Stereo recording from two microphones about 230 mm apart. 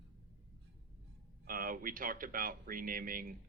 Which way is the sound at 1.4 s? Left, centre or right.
Right.